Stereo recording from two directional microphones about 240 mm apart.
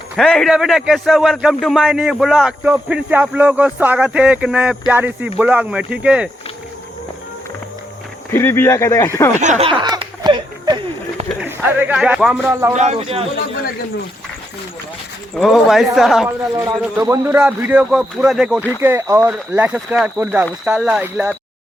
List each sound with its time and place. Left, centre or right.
0.2 s a man's voice: centre
8.3 s speech: centre
9.4 s snicker: right
11.3 s speech: centre
12.7 s speech: right
15.4 s a man's voice: centre
16.6 s a man's voice: centre